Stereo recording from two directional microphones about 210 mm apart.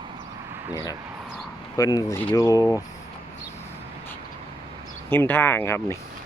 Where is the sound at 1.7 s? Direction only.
15° left (ahead or behind).